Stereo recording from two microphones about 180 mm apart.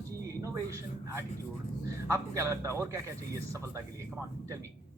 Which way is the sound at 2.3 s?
15° right (ahead or behind).